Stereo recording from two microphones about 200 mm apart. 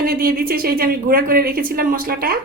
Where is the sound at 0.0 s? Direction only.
50° right (ahead or behind).